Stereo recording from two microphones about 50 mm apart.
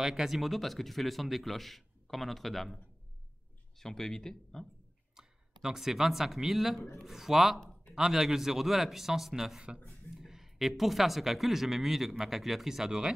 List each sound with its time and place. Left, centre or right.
0.0 s speech: centre
3.8 s speech: centre
5.1 s a man's voice: centre